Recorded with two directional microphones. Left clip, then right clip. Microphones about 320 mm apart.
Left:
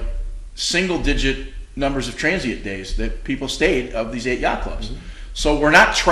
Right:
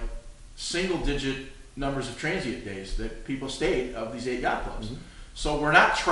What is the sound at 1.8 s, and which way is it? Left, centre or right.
Speech, left.